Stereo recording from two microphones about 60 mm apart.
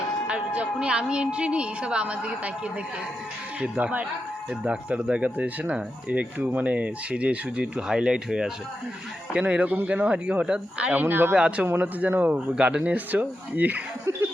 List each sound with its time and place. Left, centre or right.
0.3 s a woman's voice: centre
3.8 s speech: right
9.5 s speech: right
11.0 s speech: right
11.3 s speech: centre
11.6 s speech: right